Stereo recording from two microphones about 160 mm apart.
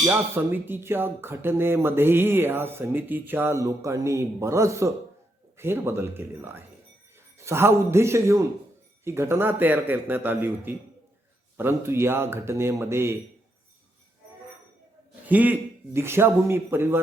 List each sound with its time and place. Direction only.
0.0 s speech: 15° right (ahead or behind)
15.3 s speech: 10° right (ahead or behind)